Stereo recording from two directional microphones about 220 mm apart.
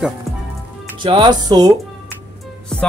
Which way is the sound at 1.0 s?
20° right (ahead or behind).